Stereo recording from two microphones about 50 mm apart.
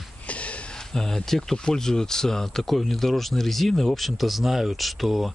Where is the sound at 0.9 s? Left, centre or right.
Centre.